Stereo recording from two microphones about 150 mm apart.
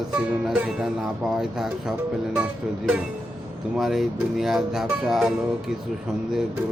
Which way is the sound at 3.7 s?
Centre (ahead or behind).